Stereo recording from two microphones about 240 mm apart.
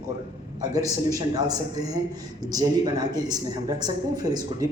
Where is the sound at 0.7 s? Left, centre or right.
Centre.